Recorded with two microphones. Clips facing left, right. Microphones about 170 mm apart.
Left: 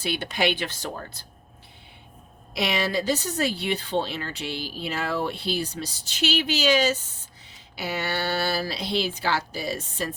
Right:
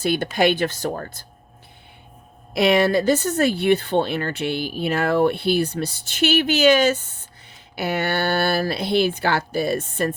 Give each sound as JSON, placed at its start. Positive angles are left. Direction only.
{"t": 0.0, "sound": "speech", "side_deg": -45}
{"t": 2.5, "sound": "speech", "side_deg": -55}